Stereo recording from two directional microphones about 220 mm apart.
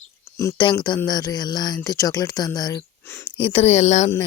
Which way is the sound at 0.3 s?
20° left (ahead or behind).